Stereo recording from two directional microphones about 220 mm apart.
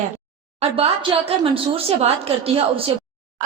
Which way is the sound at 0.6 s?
25° right (ahead or behind).